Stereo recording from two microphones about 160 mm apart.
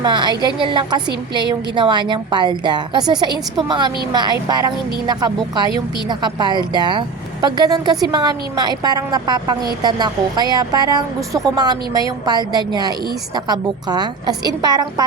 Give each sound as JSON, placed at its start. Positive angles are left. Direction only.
{"t": 0.0, "sound": "a woman's voice", "side_deg": -25}